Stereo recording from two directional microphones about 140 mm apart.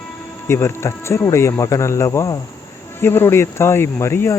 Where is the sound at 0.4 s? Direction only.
20° left (ahead or behind).